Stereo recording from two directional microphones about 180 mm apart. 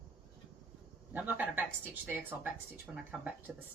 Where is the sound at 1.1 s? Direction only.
10° right (ahead or behind).